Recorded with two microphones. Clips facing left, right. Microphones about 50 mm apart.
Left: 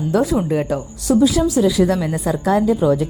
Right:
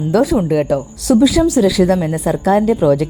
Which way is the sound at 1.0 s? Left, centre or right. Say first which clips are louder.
Right 3 dB; right.